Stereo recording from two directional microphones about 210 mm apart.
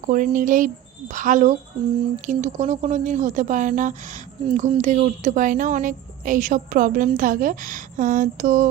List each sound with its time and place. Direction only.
0.0 s a woman's voice: 40° right (ahead or behind)